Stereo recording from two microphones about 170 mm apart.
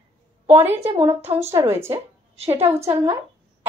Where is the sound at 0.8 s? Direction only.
35° right (ahead or behind).